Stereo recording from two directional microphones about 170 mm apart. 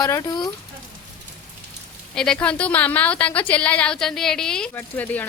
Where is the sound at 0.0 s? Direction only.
20° left (ahead or behind).